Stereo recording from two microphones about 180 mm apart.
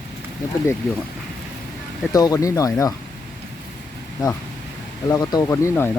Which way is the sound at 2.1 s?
20° left (ahead or behind).